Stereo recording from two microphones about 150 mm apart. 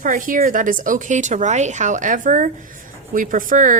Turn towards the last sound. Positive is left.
turn(degrees=-60)  # may be behind; listen again after turning